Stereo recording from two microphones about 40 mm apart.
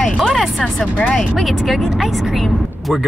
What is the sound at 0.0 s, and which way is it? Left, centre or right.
Music, centre.